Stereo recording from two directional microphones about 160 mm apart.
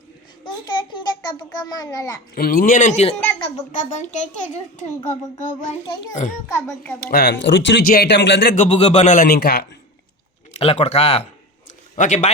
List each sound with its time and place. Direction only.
0.4 s a child's voice: 25° left (ahead or behind)
2.3 s speech: 65° left (ahead or behind)
5.0 s speech: 50° left (ahead or behind)
5.8 s a child's voice: 30° left (ahead or behind)
6.5 s a child's voice: 15° left (ahead or behind)
7.1 s speech: 85° left
8.5 s speech: 45° left (ahead or behind); by 9.6 s 80° left
10.5 s speech: 40° left (ahead or behind)